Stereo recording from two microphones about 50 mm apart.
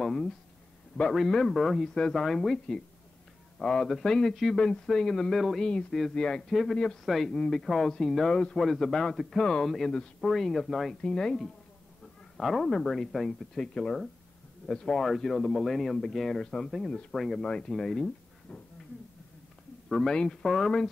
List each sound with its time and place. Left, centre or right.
0.0 s a sound: centre
1.1 s a man's voice: centre
4.6 s speech: centre
6.5 s a man's voice: centre
9.4 s speech: centre
9.7 s a man's voice: centre
11.0 s speech: centre
12.4 s a man's voice: centre
13.3 s a man's voice: centre
17.4 s speech: centre
17.6 s speech: centre
18.5 s speech: centre
19.9 s speech: centre